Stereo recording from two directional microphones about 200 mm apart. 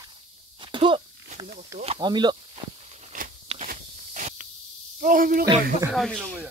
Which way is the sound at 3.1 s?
35° right (ahead or behind).